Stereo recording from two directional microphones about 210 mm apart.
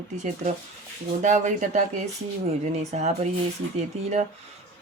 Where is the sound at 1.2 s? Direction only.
35° right (ahead or behind).